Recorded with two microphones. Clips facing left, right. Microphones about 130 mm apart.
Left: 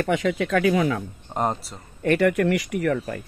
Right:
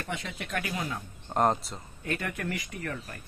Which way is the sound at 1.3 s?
Centre (ahead or behind).